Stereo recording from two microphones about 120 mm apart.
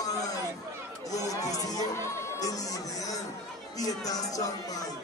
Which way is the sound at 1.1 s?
30° left (ahead or behind).